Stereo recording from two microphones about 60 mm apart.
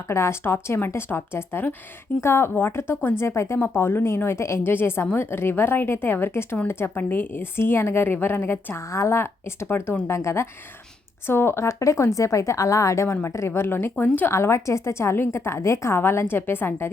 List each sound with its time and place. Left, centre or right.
0.1 s a woman's voice: left
4.6 s a woman's voice: left
8.9 s a woman's voice: left
10.1 s a woman's voice: left
14.3 s a woman's voice: left